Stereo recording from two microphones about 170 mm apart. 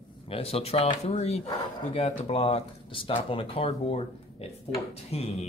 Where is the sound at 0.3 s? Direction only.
35° left (ahead or behind).